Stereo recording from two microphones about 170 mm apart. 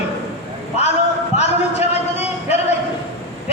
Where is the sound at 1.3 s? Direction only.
40° left (ahead or behind).